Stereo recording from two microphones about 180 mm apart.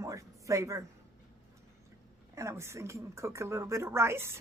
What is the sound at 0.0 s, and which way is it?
Speech, 15° right (ahead or behind).